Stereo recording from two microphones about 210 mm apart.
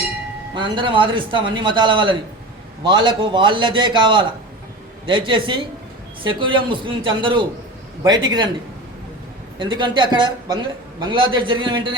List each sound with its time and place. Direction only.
0.5 s speech: 25° right (ahead or behind)
9.6 s speech: 20° right (ahead or behind)